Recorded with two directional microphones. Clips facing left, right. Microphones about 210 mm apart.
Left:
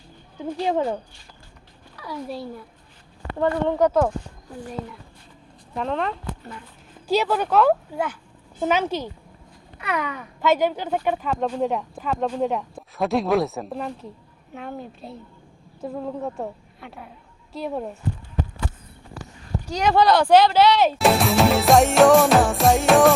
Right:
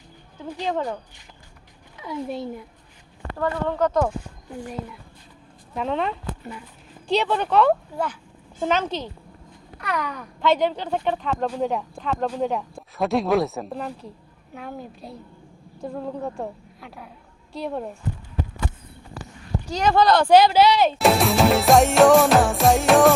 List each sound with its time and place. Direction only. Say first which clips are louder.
0.6 s speech: left 3 dB; 20° left (ahead or behind)
2.0 s a child's voice: right 2 dB; 20° right (ahead or behind)
3.3 s speech: left 3 dB; 20° left (ahead or behind)
5.7 s speech: even; centre (ahead or behind)
7.1 s speech: left 1 dB; 5° left (ahead or behind)
19.7 s speech: even; centre (ahead or behind)